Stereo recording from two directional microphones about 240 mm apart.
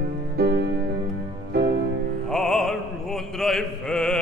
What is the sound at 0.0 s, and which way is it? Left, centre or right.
Music, right.